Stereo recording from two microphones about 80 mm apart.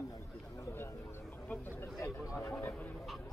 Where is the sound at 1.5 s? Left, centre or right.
Left.